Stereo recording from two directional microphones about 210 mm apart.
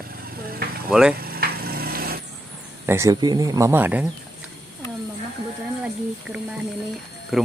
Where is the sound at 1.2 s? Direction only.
45° right (ahead or behind).